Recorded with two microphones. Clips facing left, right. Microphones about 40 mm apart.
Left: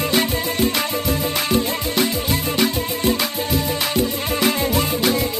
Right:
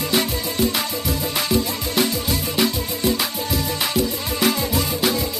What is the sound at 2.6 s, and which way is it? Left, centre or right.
Music, centre.